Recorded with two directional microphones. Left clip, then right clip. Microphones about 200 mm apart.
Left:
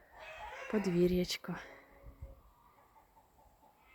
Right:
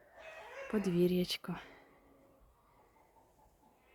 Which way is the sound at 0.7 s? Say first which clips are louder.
Left 1 dB; 5° right (ahead or behind).